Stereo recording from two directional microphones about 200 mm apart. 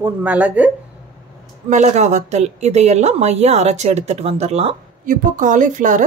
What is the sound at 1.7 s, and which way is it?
A woman's voice, 35° right (ahead or behind).